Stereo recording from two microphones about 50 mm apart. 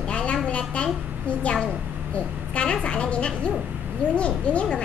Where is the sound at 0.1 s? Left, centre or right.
Left.